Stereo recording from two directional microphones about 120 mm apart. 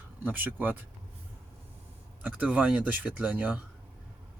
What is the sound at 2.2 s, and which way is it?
Speech, 10° right (ahead or behind).